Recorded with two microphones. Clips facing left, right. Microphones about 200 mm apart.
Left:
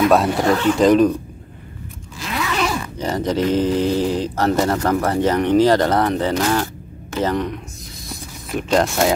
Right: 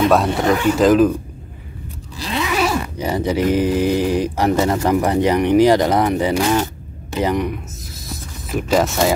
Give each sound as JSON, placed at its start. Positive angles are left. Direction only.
{"t": 0.3, "sound": "speech", "side_deg": -15}
{"t": 0.7, "sound": "speech", "side_deg": 0}
{"t": 2.1, "sound": "zipper", "side_deg": -35}
{"t": 2.4, "sound": "zipper", "side_deg": -10}
{"t": 3.0, "sound": "speech", "side_deg": -10}
{"t": 8.1, "sound": "a sound", "side_deg": -5}